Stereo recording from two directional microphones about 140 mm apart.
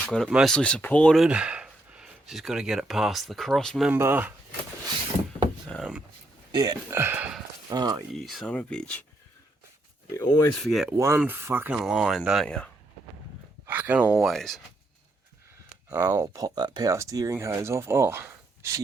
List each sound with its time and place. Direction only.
0.0 s speech: 5° left (ahead or behind)
0.3 s speech: 5° right (ahead or behind)
0.5 s speech: 10° left (ahead or behind)
1.2 s speech: 10° right (ahead or behind)
3.8 s speech: 15° right (ahead or behind)
6.5 s speech: 30° right (ahead or behind)
6.9 s speech: 15° right (ahead or behind)
7.7 s speech: 30° right (ahead or behind)
8.2 s speech: centre (ahead or behind)
10.2 s speech: 30° left (ahead or behind)
10.5 s speech: centre (ahead or behind)
10.8 s speech: 20° right (ahead or behind); by 12.7 s 5° left (ahead or behind)
13.7 s speech: 15° right (ahead or behind)
15.9 s speech: 20° right (ahead or behind)